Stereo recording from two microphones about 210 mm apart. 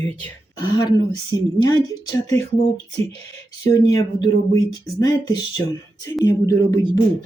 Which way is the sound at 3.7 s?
15° left (ahead or behind).